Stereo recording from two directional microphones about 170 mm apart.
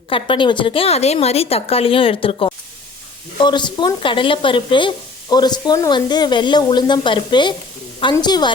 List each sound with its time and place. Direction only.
0.1 s a woman's voice: 30° left (ahead or behind)